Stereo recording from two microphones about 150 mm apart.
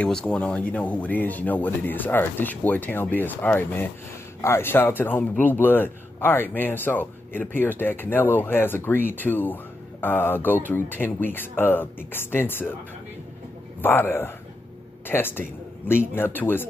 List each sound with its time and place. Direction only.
0.0 s speech: 5° left (ahead or behind)
13.7 s speech: 15° left (ahead or behind)